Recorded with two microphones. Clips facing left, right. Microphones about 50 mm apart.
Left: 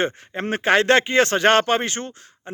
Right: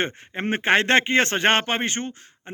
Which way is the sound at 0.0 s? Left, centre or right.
Right.